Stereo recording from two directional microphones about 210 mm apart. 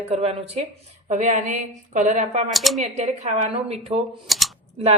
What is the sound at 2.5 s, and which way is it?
Speech, centre (ahead or behind).